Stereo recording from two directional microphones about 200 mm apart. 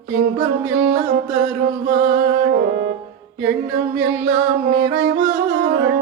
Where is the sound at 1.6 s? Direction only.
40° right (ahead or behind).